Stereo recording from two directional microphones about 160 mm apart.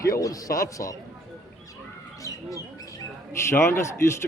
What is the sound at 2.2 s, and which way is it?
Speech, 20° left (ahead or behind).